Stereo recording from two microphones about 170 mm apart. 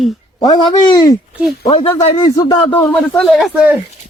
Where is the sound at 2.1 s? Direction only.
20° left (ahead or behind).